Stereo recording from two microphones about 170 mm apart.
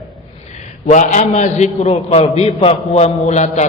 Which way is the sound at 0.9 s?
45° left (ahead or behind).